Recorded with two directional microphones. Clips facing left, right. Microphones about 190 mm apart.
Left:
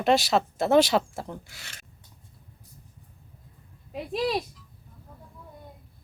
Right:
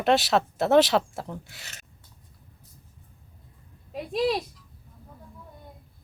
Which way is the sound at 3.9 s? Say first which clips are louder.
Right 2 dB; centre (ahead or behind).